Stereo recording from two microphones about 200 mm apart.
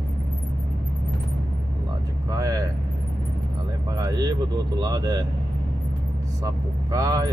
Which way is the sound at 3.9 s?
20° right (ahead or behind).